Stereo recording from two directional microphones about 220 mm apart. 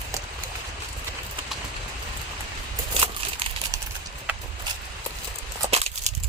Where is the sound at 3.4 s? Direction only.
25° right (ahead or behind).